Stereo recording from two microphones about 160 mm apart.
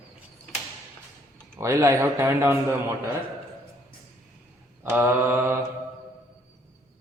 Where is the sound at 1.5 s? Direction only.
20° right (ahead or behind).